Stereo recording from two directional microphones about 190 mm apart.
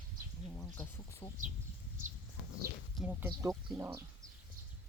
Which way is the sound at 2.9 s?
10° right (ahead or behind).